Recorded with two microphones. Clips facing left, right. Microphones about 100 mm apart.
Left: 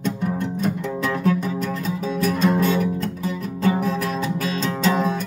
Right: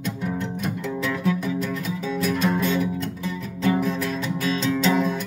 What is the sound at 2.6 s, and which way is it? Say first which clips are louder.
Music: left 3 dB; 45° left (ahead or behind).